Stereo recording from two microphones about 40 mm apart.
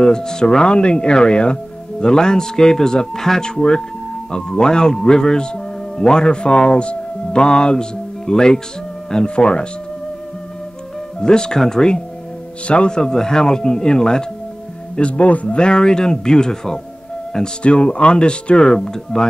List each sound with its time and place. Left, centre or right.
0.0 s speech: centre
11.1 s speech: centre
15.0 s speech: left
15.5 s speech: left
17.6 s speech: left
18.8 s speech: centre